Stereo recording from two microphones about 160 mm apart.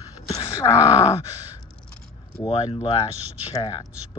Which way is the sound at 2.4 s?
35° left (ahead or behind).